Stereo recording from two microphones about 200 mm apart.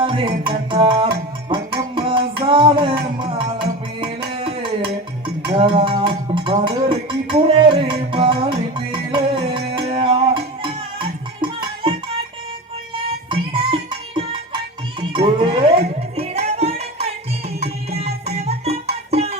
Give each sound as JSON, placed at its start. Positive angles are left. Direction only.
{"t": 0.0, "sound": "music", "side_deg": -25}
{"t": 2.0, "sound": "child singing", "side_deg": -25}
{"t": 2.5, "sound": "music", "side_deg": -25}
{"t": 5.5, "sound": "a sound", "side_deg": -25}
{"t": 13.3, "sound": "music", "side_deg": -25}
{"t": 15.1, "sound": "music", "side_deg": -25}
{"t": 18.3, "sound": "music", "side_deg": -30}